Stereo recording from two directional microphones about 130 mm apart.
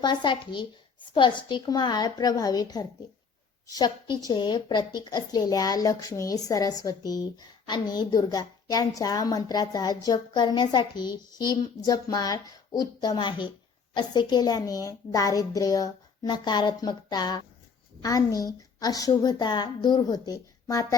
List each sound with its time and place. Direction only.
0.0 s a woman's voice: 35° left (ahead or behind)